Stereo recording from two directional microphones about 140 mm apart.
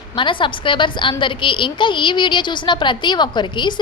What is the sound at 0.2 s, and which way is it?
A woman's voice, 35° left (ahead or behind).